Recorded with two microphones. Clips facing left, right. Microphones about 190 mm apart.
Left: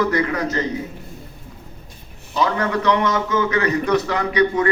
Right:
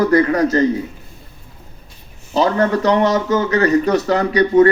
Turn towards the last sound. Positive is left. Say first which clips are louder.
# right 6 dB
turn(degrees=-35)  # may be behind; listen again after turning